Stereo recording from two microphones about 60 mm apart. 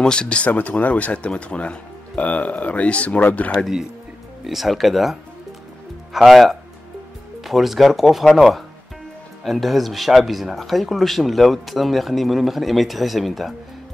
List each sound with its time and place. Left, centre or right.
0.0 s speech: centre
0.5 s speech: left
4.5 s speech: centre
6.1 s speech: centre